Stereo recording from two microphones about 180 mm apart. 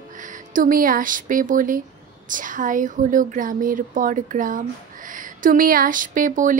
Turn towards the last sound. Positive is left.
turn(degrees=-45)  # may be behind; listen again after turning